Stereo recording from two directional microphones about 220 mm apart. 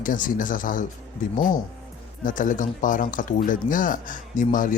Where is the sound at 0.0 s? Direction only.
40° left (ahead or behind).